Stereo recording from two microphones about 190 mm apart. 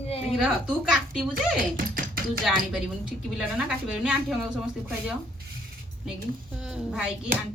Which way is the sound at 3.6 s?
5° right (ahead or behind).